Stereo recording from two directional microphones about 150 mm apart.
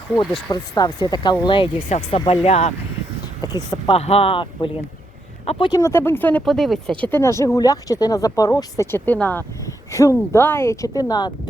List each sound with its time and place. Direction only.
0.5 s speech: 25° left (ahead or behind)
1.9 s speech: 45° left (ahead or behind)
3.4 s speech: 30° left (ahead or behind)
5.7 s speech: 15° left (ahead or behind)